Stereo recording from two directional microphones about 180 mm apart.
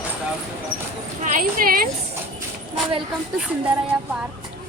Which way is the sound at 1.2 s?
45° right (ahead or behind).